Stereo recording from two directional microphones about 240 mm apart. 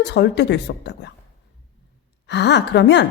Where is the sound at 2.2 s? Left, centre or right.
Left.